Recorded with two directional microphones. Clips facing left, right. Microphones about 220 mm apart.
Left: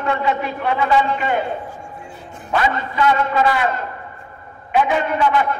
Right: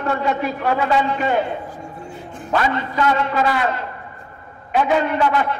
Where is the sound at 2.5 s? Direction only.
40° right (ahead or behind).